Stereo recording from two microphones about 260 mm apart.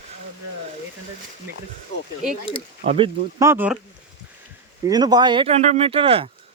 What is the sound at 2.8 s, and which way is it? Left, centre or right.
Speech, right.